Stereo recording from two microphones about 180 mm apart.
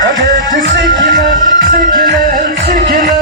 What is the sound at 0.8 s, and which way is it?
Music, 20° left (ahead or behind).